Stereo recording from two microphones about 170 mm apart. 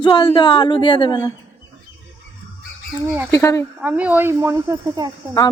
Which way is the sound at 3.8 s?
10° right (ahead or behind).